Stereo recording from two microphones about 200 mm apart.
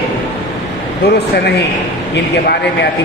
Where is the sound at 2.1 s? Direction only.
60° left (ahead or behind).